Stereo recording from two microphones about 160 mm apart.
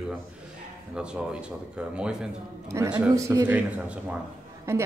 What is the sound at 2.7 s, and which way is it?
A man's voice, 20° right (ahead or behind).